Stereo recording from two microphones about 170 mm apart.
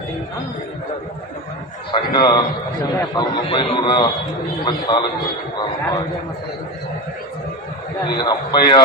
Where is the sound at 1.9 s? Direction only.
25° left (ahead or behind).